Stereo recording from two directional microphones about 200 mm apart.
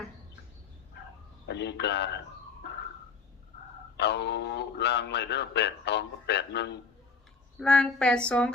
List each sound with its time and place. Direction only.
1.5 s a man's voice: 60° left (ahead or behind)
3.9 s a man's voice: 60° left (ahead or behind)
7.6 s a sound: 5° left (ahead or behind)